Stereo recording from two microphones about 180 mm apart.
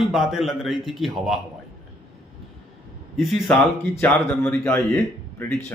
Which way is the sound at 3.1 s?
Centre (ahead or behind).